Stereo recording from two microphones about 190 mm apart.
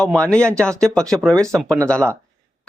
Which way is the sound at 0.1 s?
5° left (ahead or behind).